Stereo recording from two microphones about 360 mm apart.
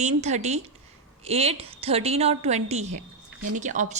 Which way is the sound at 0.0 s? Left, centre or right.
Centre.